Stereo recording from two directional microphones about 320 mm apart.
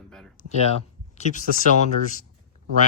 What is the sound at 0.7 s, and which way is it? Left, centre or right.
Speech, left.